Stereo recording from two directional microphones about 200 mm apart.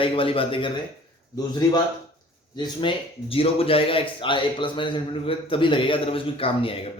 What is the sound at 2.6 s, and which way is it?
Speech, 25° left (ahead or behind).